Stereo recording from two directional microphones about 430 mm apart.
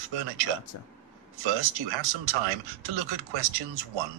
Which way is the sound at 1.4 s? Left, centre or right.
Right.